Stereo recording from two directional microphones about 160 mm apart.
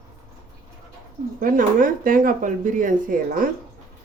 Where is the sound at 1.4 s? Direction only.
60° right (ahead or behind).